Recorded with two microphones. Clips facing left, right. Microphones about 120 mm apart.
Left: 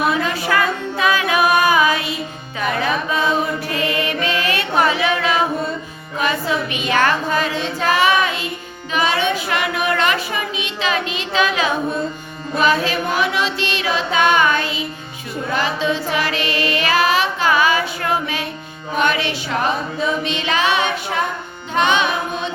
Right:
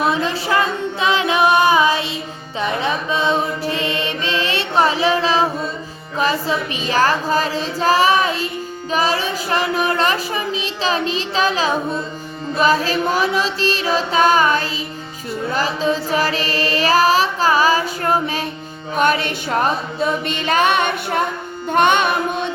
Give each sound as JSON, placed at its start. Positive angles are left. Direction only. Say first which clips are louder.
{"t": 0.0, "sound": "music", "louder": "even", "side_deg": -30}
{"t": 2.6, "sound": "mantra", "louder": "even", "side_deg": -25}
{"t": 6.1, "sound": "female singing", "louder": "right 1 dB", "side_deg": -35}
{"t": 8.9, "sound": "a sound", "louder": "left 1 dB", "side_deg": -35}
{"t": 18.9, "sound": "music", "louder": "right 2 dB", "side_deg": -45}